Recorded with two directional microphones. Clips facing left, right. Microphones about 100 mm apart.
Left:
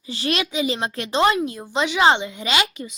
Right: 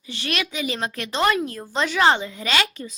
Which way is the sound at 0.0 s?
30° left (ahead or behind).